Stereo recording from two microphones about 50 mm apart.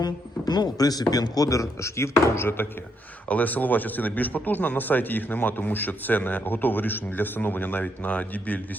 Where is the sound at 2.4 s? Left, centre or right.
Left.